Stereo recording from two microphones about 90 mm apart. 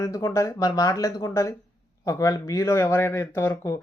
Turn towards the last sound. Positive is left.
turn(degrees=40)  # may be behind; listen again after turning